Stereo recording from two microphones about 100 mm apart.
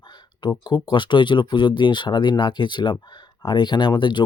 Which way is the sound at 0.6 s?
50° left (ahead or behind).